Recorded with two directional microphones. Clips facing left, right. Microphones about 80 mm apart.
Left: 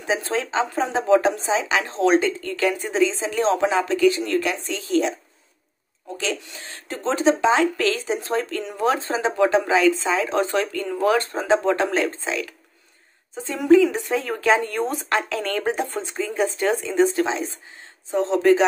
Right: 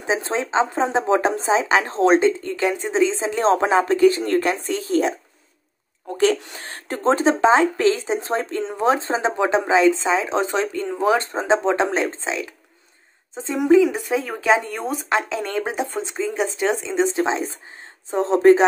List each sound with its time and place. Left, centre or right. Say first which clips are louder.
0.0 s speech: right 1 dB; right
6.1 s speech: right 9 dB; right